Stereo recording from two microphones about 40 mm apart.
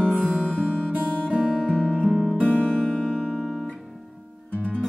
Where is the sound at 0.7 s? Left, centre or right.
Centre.